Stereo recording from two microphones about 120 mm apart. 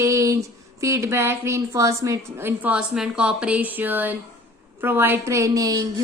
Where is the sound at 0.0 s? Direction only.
25° right (ahead or behind).